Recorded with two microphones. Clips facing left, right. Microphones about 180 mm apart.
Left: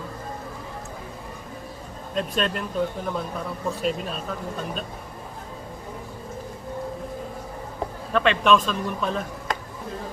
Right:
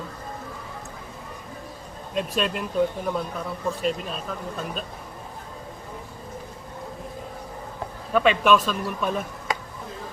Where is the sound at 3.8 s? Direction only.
Centre (ahead or behind).